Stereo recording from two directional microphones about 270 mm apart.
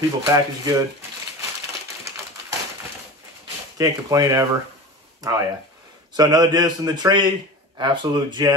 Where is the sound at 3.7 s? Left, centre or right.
Centre.